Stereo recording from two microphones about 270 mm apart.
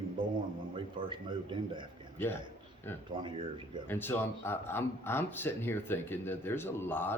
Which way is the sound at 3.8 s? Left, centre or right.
Centre.